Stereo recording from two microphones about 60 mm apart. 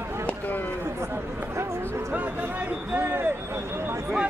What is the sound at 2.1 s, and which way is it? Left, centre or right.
Speech, right.